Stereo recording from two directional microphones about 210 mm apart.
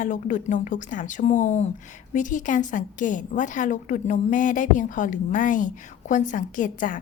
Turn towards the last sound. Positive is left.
turn(degrees=40)  # may be behind; listen again after turning